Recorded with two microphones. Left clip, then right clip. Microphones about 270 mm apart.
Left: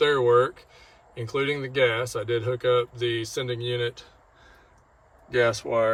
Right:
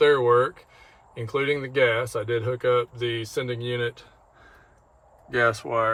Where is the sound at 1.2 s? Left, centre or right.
Centre.